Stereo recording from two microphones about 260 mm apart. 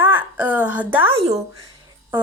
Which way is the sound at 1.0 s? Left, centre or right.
Right.